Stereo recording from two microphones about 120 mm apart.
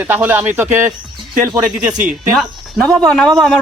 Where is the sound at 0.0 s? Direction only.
15° right (ahead or behind).